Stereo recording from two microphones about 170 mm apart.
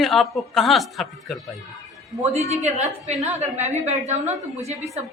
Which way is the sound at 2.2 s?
40° right (ahead or behind).